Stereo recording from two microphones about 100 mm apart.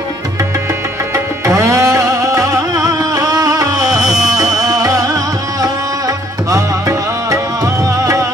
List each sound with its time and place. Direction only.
1.1 s music: 30° right (ahead or behind)